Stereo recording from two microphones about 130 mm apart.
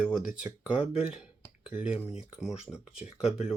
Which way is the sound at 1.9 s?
50° left (ahead or behind).